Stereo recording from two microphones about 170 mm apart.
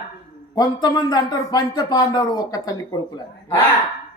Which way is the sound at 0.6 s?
25° left (ahead or behind).